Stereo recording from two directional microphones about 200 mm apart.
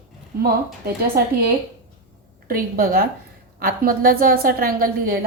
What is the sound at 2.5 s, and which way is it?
A woman's voice, 45° right (ahead or behind).